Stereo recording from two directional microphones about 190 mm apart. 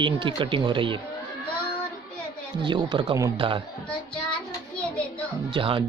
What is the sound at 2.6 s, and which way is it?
Speech, 25° right (ahead or behind).